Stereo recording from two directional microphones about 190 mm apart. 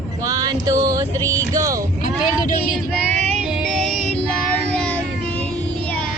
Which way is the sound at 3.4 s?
5° right (ahead or behind).